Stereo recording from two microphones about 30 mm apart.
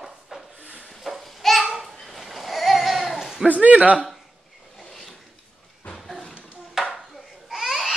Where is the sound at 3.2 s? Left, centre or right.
Centre.